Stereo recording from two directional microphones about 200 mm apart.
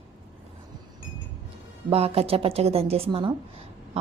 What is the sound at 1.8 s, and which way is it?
Speech, 30° right (ahead or behind).